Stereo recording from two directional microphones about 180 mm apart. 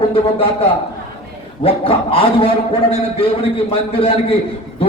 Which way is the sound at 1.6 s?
30° left (ahead or behind).